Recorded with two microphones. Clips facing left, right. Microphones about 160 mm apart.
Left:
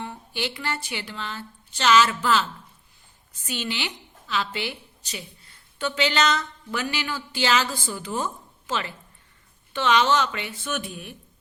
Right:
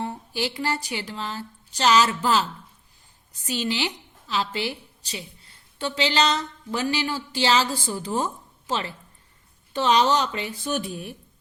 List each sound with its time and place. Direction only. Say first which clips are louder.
0.0 s a woman's voice: right 3 dB; 35° right (ahead or behind)